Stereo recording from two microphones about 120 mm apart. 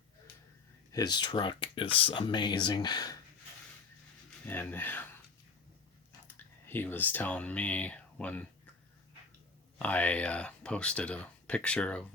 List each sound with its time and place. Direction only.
0.9 s speech: 35° left (ahead or behind)
4.4 s speech: 15° left (ahead or behind)
6.2 s speech: 15° left (ahead or behind)
9.7 s speech: 10° left (ahead or behind)